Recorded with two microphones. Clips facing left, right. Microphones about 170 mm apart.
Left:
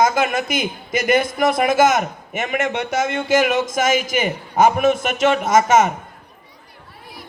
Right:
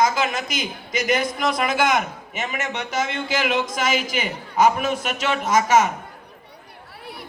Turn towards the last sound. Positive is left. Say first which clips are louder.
# left 3 dB
turn(degrees=50)  # may be behind; listen again after turning